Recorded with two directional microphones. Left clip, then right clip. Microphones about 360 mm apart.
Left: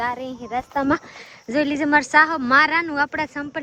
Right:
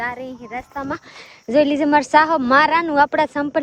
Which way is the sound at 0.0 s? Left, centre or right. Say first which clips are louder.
Left 1 dB; centre.